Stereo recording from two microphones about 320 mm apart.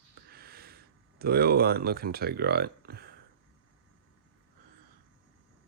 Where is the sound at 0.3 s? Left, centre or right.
Right.